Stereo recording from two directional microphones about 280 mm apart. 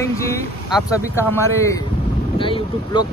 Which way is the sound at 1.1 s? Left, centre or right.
Centre.